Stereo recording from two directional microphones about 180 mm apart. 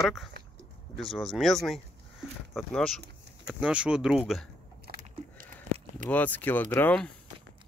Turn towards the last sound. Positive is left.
turn(degrees=5)  # may be behind; listen again after turning